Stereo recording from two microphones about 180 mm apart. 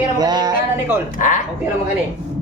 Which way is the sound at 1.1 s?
45° left (ahead or behind).